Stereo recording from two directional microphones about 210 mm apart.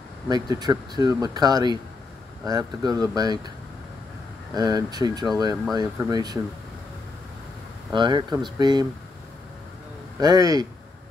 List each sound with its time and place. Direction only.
0.3 s speech: 20° right (ahead or behind)
4.6 s speech: 20° right (ahead or behind)
7.9 s speech: 20° right (ahead or behind)
10.1 s speech: 15° right (ahead or behind)